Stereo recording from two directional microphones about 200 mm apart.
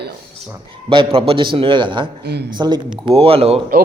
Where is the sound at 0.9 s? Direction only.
25° right (ahead or behind).